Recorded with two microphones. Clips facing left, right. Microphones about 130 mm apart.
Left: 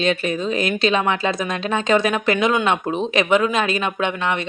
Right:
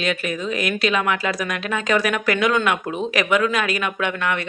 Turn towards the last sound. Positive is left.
turn(degrees=25)  # may be behind; listen again after turning